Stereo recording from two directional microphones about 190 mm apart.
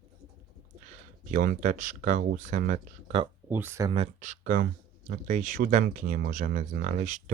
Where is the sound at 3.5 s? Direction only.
10° right (ahead or behind).